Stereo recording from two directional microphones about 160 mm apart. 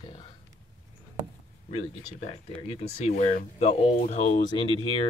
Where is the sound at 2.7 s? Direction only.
45° left (ahead or behind).